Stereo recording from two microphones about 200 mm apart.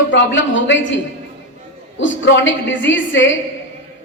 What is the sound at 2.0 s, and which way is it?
A woman's voice, 70° left (ahead or behind).